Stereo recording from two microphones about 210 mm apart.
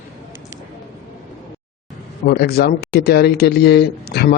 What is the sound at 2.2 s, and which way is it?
A man's voice, 45° left (ahead or behind).